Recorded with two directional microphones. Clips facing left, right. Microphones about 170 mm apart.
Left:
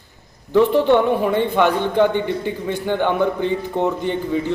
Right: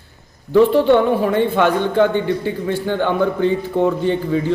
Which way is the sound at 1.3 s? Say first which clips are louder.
Right 1 dB; 15° left (ahead or behind).